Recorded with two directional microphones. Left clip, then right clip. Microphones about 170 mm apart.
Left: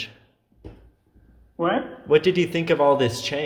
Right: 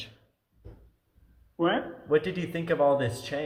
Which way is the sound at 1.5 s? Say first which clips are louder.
Left 4 dB; 25° right (ahead or behind).